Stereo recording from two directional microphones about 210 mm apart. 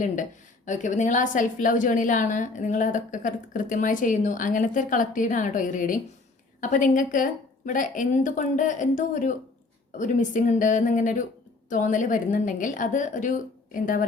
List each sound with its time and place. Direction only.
0.0 s a woman's voice: 35° left (ahead or behind)